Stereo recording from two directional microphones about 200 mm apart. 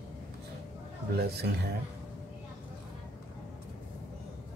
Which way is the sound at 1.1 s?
55° right (ahead or behind).